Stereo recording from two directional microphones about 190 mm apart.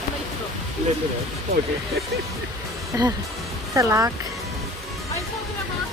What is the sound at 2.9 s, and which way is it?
Speech, 15° right (ahead or behind).